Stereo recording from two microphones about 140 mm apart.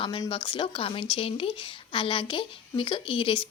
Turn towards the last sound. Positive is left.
turn(degrees=40)  # may be behind; listen again after turning